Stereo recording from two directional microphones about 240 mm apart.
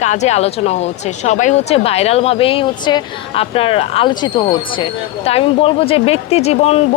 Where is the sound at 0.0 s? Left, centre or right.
Left.